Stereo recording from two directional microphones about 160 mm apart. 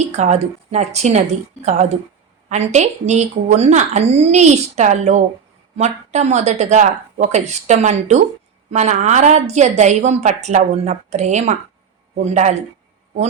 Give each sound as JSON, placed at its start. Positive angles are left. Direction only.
{"t": 0.2, "sound": "a woman's voice", "side_deg": -45}
{"t": 2.5, "sound": "a woman's voice", "side_deg": -45}